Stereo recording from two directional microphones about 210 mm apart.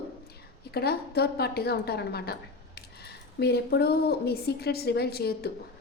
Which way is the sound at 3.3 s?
50° left (ahead or behind).